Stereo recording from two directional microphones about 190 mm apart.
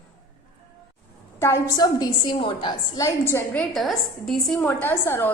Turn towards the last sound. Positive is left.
turn(degrees=10)  # may be behind; listen again after turning